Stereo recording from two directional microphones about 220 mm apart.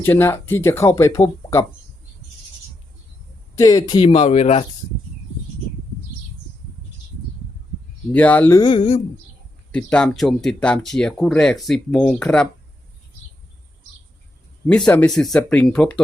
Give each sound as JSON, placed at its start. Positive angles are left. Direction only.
{"t": 0.0, "sound": "speech", "side_deg": 10}
{"t": 3.5, "sound": "speech", "side_deg": 15}
{"t": 8.1, "sound": "speech", "side_deg": 5}
{"t": 9.7, "sound": "speech", "side_deg": 5}
{"t": 14.7, "sound": "speech", "side_deg": 5}